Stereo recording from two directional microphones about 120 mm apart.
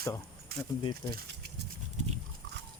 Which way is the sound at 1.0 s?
30° left (ahead or behind).